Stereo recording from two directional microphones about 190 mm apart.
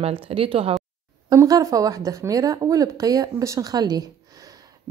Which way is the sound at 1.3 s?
15° right (ahead or behind).